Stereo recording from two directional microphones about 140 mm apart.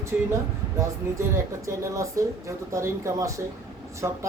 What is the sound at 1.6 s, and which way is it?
Speech, 20° right (ahead or behind).